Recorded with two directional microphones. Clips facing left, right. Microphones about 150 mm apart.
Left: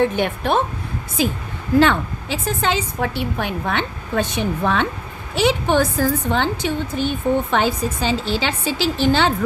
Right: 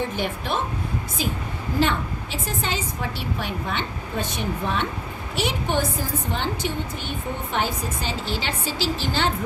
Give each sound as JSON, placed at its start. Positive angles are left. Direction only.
{"t": 0.0, "sound": "speech", "side_deg": 60}
{"t": 1.8, "sound": "a woman's voice", "side_deg": 90}
{"t": 7.5, "sound": "a woman's voice", "side_deg": 90}